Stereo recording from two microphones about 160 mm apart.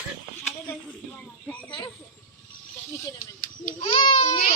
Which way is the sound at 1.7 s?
30° left (ahead or behind).